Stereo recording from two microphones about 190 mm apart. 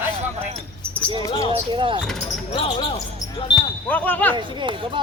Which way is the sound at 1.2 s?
15° left (ahead or behind).